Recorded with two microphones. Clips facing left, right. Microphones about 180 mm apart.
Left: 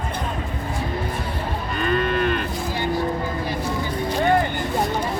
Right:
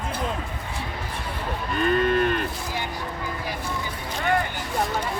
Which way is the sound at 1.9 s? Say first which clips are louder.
Even; 40° right (ahead or behind).